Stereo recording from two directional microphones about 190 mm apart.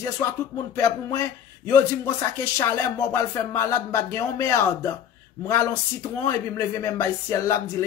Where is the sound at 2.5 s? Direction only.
15° left (ahead or behind).